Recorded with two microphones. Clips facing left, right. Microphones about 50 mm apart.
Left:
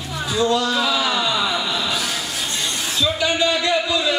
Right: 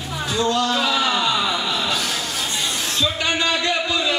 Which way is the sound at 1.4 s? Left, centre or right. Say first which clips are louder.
Even; centre.